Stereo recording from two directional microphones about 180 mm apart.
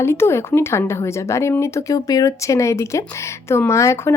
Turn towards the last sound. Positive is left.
turn(degrees=15)  # may be behind; listen again after turning